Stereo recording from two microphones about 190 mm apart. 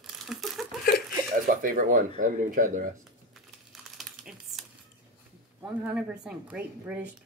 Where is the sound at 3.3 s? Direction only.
Centre (ahead or behind).